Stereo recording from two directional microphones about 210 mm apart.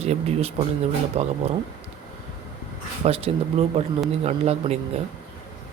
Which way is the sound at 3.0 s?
30° right (ahead or behind).